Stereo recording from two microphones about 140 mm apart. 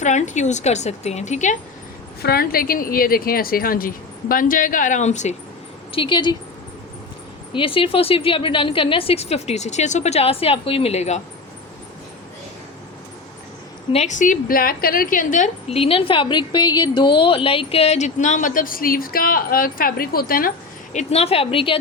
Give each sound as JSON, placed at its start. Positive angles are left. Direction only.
{"t": 0.0, "sound": "speech", "side_deg": 60}
{"t": 2.2, "sound": "speech", "side_deg": 90}
{"t": 5.9, "sound": "speech", "side_deg": 35}
{"t": 7.5, "sound": "speech", "side_deg": 40}
{"t": 13.9, "sound": "a woman's voice", "side_deg": 55}
{"t": 15.7, "sound": "speech", "side_deg": 40}
{"t": 20.9, "sound": "speech", "side_deg": 50}